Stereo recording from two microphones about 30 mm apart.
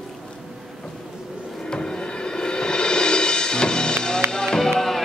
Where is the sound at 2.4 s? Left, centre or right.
Left.